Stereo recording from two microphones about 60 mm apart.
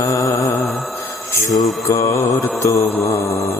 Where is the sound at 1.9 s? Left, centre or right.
Left.